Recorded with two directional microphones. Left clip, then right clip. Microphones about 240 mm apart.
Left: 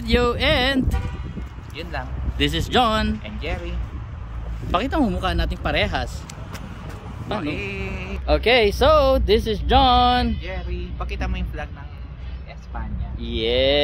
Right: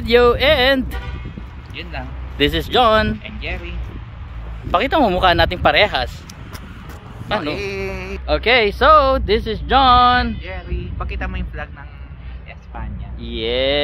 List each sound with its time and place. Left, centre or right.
0.0 s speech: centre
4.6 s speech: centre
7.3 s speech: centre
8.3 s speech: centre
10.5 s speech: centre
13.2 s speech: centre